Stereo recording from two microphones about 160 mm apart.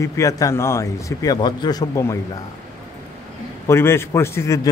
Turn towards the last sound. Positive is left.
turn(degrees=15)  # may be behind; listen again after turning